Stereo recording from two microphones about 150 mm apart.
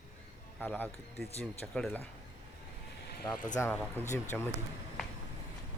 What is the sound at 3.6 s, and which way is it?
Speech, 10° left (ahead or behind).